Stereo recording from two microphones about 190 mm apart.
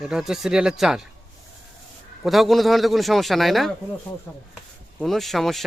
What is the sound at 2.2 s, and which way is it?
Speech, centre (ahead or behind).